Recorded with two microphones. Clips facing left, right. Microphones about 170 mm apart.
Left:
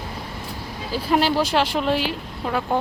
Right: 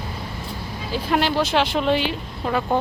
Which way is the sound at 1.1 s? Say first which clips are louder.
Left 1 dB; 5° left (ahead or behind).